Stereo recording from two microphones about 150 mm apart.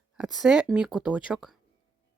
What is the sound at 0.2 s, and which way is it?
Speech, 5° right (ahead or behind).